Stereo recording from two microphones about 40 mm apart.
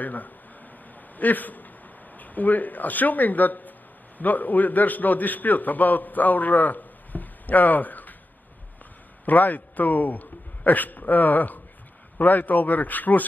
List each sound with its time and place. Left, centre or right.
0.0 s a man's voice: left
9.2 s a man's voice: left